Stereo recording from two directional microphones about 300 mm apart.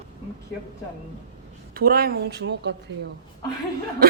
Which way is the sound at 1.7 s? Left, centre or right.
Right.